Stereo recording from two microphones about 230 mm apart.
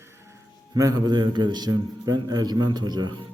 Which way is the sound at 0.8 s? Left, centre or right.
Centre.